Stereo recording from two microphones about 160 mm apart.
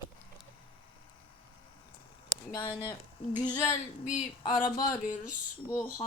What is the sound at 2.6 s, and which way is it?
Speech, 25° left (ahead or behind).